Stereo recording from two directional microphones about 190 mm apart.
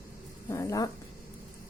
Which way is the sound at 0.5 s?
15° left (ahead or behind).